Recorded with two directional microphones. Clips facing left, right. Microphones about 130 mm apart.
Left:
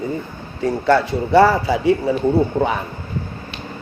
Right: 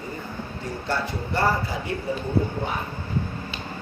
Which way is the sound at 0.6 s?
80° left.